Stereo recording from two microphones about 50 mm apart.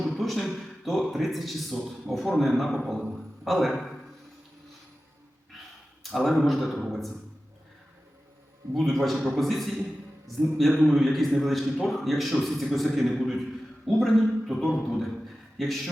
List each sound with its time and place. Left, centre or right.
0.0 s a sound: centre
1.1 s a man's voice: centre
6.0 s a man's voice: centre
8.9 s a man's voice: centre